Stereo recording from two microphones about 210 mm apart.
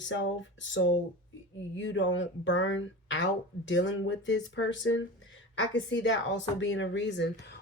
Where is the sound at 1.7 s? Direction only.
60° left (ahead or behind).